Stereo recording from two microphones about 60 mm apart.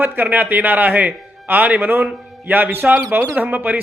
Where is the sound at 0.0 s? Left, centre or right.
Right.